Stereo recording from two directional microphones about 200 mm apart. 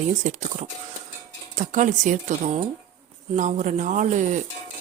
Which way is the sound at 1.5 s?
40° right (ahead or behind).